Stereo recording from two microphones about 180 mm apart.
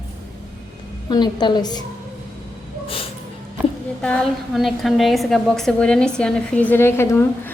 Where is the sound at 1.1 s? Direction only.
25° left (ahead or behind).